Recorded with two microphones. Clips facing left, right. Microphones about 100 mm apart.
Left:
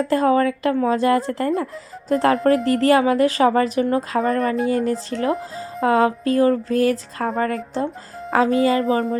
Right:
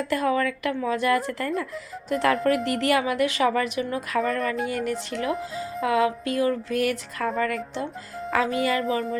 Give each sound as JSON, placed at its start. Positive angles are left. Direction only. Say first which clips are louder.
{"t": 0.0, "sound": "speech", "louder": "left 6 dB", "side_deg": 35}